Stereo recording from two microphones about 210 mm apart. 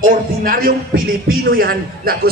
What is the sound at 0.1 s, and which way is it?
A man's voice, 40° right (ahead or behind).